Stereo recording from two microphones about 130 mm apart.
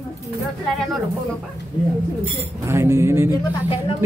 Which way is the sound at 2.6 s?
20° right (ahead or behind).